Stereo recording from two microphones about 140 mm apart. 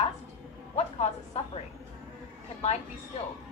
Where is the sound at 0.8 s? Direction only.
45° left (ahead or behind).